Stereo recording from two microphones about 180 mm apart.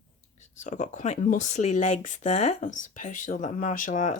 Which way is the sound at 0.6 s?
40° left (ahead or behind).